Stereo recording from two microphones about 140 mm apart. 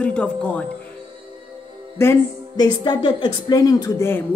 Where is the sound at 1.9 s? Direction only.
25° left (ahead or behind).